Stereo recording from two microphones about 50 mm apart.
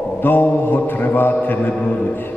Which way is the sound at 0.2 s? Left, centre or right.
Left.